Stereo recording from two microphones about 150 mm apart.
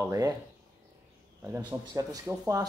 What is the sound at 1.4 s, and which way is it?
Speech, 15° right (ahead or behind).